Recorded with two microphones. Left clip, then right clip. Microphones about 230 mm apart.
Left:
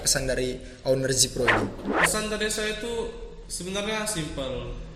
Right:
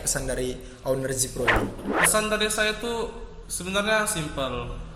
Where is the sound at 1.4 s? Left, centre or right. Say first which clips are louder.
Right 4 dB; centre.